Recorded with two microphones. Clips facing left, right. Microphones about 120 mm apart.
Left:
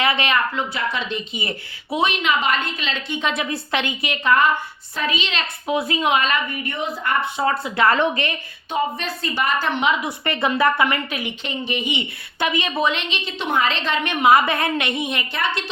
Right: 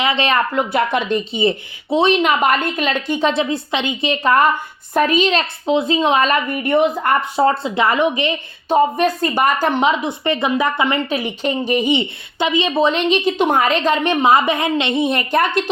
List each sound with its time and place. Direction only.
0.0 s speech: 20° right (ahead or behind)
0.5 s a woman's voice: 55° right (ahead or behind)
1.3 s a woman's voice: 25° right (ahead or behind); by 3.2 s 50° right (ahead or behind)
3.2 s a woman's voice: 35° right (ahead or behind)
3.5 s a woman's voice: 20° right (ahead or behind); by 5.5 s 40° right (ahead or behind)
5.6 s a woman's voice: 25° right (ahead or behind); by 7.5 s 40° right (ahead or behind)
7.5 s a woman's voice: 20° right (ahead or behind)
9.0 s a woman's voice: 50° right (ahead or behind)
10.0 s a woman's voice: 20° right (ahead or behind)
12.4 s a woman's voice: 20° right (ahead or behind)
12.9 s a woman's voice: 40° right (ahead or behind)
15.3 s a woman's voice: 45° right (ahead or behind)